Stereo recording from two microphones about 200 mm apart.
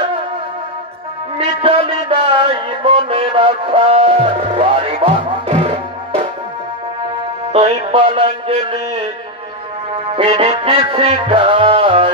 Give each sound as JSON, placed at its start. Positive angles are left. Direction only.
{"t": 1.6, "sound": "music", "side_deg": -30}
{"t": 7.5, "sound": "music", "side_deg": -25}
{"t": 10.1, "sound": "music", "side_deg": -30}